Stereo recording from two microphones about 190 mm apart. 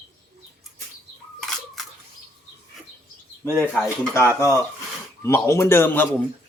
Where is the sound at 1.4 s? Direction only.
Centre (ahead or behind).